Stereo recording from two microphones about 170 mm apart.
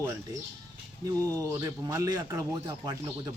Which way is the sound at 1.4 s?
20° right (ahead or behind).